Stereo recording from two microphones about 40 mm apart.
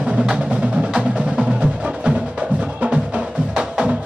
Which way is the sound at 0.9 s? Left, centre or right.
Right.